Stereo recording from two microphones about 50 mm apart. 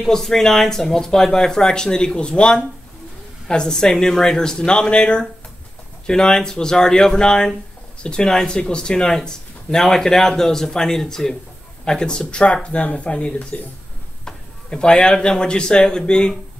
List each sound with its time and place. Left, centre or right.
0.0 s speech: centre